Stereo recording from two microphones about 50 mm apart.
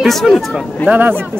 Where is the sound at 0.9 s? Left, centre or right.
Right.